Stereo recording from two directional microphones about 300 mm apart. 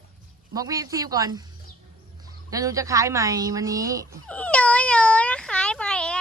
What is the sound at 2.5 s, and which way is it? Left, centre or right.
Speech, centre.